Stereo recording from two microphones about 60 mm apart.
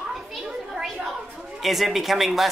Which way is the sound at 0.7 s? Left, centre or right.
Centre.